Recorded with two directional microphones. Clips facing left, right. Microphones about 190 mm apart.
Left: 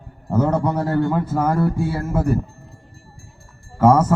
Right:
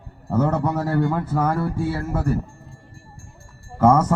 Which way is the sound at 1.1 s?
5° left (ahead or behind).